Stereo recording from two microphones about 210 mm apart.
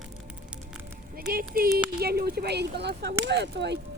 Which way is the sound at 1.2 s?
45° right (ahead or behind).